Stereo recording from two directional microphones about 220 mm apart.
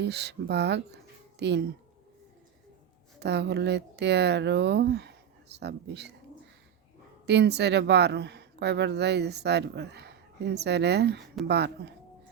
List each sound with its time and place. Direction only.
0.0 s speech: 50° right (ahead or behind)
3.2 s speech: 50° right (ahead or behind)
7.3 s speech: 50° right (ahead or behind)